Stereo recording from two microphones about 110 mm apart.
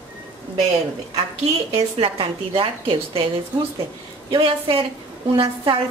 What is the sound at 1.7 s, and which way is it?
A woman's voice, 55° right (ahead or behind).